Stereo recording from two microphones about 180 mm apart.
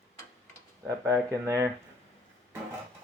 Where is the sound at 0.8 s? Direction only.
15° right (ahead or behind).